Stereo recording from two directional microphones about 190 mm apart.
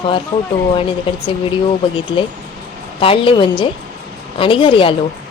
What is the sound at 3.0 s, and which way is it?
A woman's voice, 30° left (ahead or behind).